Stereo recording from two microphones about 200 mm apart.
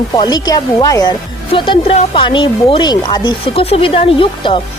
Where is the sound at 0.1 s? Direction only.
20° left (ahead or behind).